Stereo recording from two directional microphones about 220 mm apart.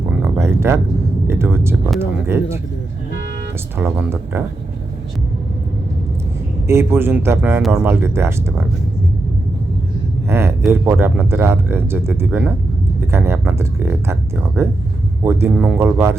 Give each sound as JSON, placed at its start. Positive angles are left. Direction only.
{"t": 0.2, "sound": "a sound", "side_deg": -10}
{"t": 1.3, "sound": "speech", "side_deg": -10}
{"t": 3.8, "sound": "speech", "side_deg": -10}
{"t": 6.7, "sound": "speech", "side_deg": -10}
{"t": 10.2, "sound": "a sound", "side_deg": -10}
{"t": 10.7, "sound": "speech", "side_deg": -10}